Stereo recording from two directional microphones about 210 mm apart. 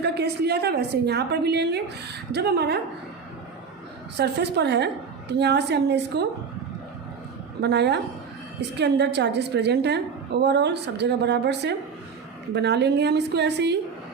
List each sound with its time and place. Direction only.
0.0 s a woman's voice: 50° right (ahead or behind)
4.2 s a woman's voice: 55° right (ahead or behind)
7.6 s a woman's voice: 55° right (ahead or behind)